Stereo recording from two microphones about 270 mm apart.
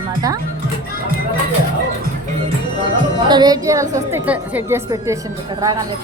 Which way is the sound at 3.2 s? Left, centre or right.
Centre.